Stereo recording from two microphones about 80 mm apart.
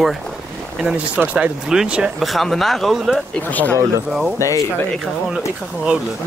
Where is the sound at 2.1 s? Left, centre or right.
Centre.